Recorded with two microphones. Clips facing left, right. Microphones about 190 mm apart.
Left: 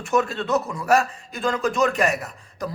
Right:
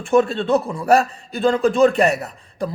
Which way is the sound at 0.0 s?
30° right (ahead or behind).